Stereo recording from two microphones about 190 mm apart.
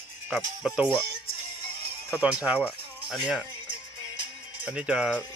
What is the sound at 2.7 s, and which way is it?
Rattle, 5° left (ahead or behind).